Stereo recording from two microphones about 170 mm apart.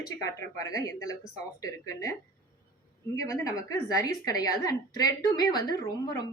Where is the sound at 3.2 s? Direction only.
20° left (ahead or behind).